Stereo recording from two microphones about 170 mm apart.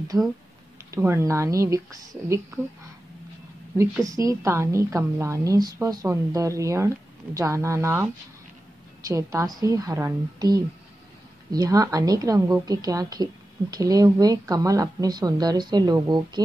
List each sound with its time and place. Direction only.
0.9 s a woman's voice: 15° right (ahead or behind)
4.0 s a woman's voice: 20° right (ahead or behind)